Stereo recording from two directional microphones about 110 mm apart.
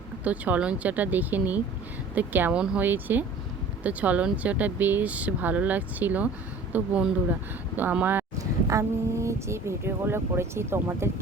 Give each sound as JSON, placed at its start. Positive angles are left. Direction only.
{"t": 0.3, "sound": "speech", "side_deg": -15}
{"t": 8.4, "sound": "speech", "side_deg": -30}